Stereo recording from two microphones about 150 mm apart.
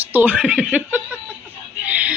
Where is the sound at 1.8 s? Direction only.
10° right (ahead or behind).